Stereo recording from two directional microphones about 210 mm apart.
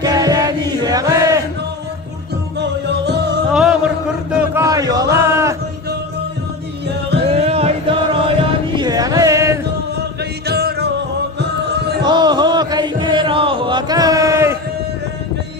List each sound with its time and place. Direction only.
0.0 s chant: 20° right (ahead or behind)
3.5 s chant: 5° right (ahead or behind)
4.3 s a sound: 5° right (ahead or behind)
4.6 s music: 15° right (ahead or behind)
7.2 s music: 30° right (ahead or behind)
10.5 s music: 50° right (ahead or behind)
12.0 s chant: 20° right (ahead or behind)